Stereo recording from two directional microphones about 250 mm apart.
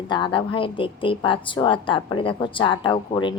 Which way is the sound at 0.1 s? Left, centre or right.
Centre.